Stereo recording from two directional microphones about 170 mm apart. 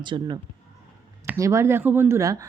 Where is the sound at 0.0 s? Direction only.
25° right (ahead or behind).